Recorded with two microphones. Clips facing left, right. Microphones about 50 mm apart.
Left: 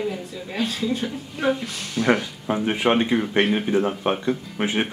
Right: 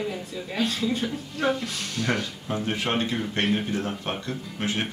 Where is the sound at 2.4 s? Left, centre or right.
Left.